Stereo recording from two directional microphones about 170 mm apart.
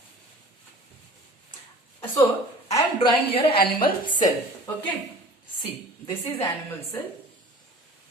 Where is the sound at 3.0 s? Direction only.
30° left (ahead or behind).